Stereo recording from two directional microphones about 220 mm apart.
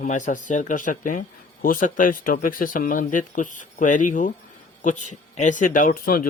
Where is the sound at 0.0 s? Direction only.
35° left (ahead or behind).